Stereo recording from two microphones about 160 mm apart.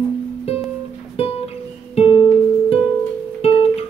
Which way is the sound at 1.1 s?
40° left (ahead or behind).